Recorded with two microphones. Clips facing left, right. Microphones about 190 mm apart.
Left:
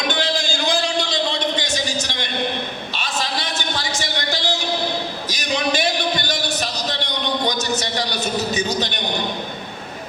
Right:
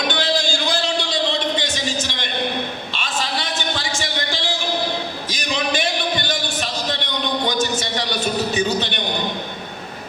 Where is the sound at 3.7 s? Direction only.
40° left (ahead or behind).